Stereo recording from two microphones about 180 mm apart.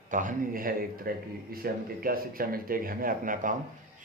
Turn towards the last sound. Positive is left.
turn(degrees=-50)  # may be behind; listen again after turning